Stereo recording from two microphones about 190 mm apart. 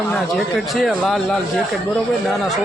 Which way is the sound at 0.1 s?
Centre (ahead or behind).